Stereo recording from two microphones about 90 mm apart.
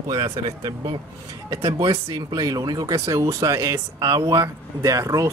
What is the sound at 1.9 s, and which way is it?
Speech, 40° right (ahead or behind).